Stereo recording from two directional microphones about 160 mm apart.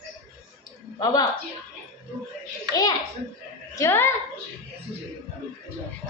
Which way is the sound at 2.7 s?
25° left (ahead or behind).